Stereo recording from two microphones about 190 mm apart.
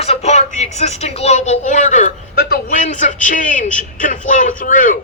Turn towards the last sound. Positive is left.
turn(degrees=45)  # may be behind; listen again after turning